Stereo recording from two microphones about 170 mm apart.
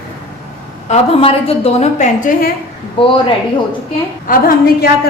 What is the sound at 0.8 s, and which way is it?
A woman's voice, 40° left (ahead or behind).